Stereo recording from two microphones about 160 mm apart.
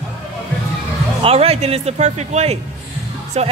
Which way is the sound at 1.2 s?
40° right (ahead or behind).